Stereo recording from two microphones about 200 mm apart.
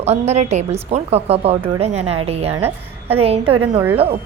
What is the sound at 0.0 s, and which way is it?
A woman's voice, 35° right (ahead or behind).